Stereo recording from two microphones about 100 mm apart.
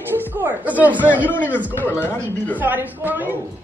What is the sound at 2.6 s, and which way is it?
Speech, 20° right (ahead or behind).